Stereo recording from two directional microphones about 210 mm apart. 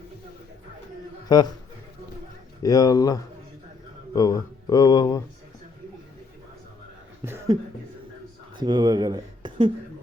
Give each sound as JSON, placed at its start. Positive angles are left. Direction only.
{"t": 1.3, "sound": "a man's voice", "side_deg": 20}
{"t": 2.6, "sound": "speech", "side_deg": 15}
{"t": 7.2, "sound": "chuckle", "side_deg": -15}
{"t": 8.5, "sound": "speech", "side_deg": -20}